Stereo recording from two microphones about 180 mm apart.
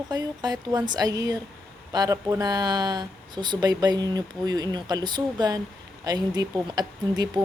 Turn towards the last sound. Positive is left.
turn(degrees=-20)  # may be behind; listen again after turning